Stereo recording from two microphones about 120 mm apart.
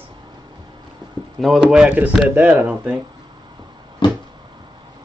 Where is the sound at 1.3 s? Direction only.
Centre (ahead or behind).